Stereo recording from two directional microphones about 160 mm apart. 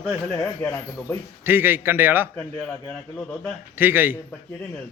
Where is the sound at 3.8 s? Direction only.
10° right (ahead or behind).